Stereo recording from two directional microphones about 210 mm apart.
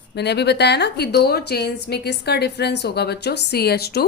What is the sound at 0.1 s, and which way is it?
A woman's voice, 55° left (ahead or behind).